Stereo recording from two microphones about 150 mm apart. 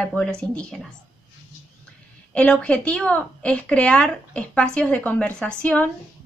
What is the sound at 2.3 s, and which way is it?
A woman's voice, 10° left (ahead or behind).